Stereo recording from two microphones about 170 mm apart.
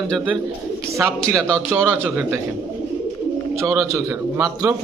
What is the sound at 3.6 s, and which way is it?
A man's voice, 20° right (ahead or behind).